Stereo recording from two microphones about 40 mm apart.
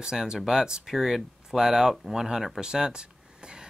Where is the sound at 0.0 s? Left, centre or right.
Centre.